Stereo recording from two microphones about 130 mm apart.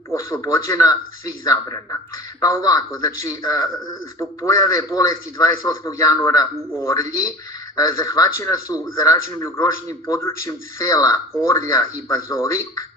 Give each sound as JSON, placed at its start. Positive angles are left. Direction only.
{"t": 0.1, "sound": "a man's voice", "side_deg": 25}